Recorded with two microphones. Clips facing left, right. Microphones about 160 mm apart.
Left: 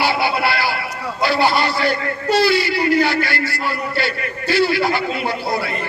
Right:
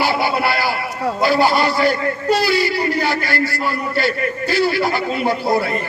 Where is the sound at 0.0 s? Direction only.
45° right (ahead or behind).